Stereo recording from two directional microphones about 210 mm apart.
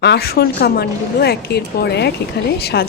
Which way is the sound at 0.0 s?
50° left (ahead or behind).